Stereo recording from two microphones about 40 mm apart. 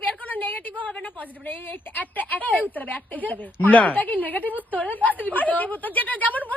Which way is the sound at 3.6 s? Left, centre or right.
Left.